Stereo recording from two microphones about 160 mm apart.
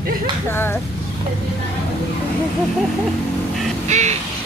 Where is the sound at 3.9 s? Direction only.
45° right (ahead or behind).